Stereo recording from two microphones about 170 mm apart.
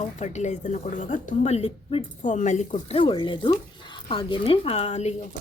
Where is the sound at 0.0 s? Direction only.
45° left (ahead or behind).